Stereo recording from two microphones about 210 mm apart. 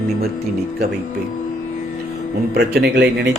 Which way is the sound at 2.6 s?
50° right (ahead or behind).